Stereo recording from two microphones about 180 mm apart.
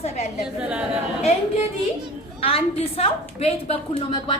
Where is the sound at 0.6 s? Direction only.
5° right (ahead or behind).